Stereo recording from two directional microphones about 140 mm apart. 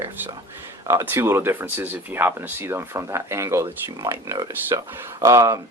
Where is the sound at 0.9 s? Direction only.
20° right (ahead or behind).